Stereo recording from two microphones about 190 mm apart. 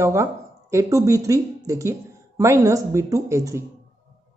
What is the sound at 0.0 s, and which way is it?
A woman's voice, 15° right (ahead or behind).